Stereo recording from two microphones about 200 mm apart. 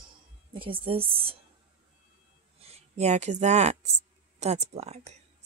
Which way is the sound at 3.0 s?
35° right (ahead or behind).